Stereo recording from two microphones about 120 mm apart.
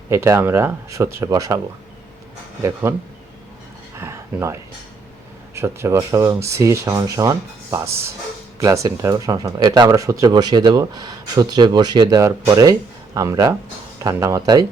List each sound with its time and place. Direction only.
0.1 s speech: 20° right (ahead or behind)
3.9 s a sound: 20° right (ahead or behind)
5.5 s speech: 20° right (ahead or behind)